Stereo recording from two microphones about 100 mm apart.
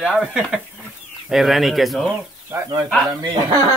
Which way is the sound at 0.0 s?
5° right (ahead or behind).